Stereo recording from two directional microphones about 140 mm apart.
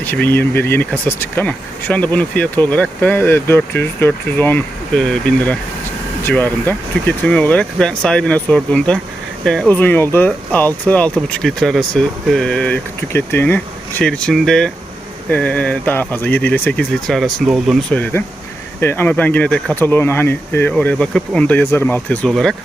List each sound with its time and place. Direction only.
0.0 s speech: 15° left (ahead or behind)
17.9 s speech: 10° left (ahead or behind)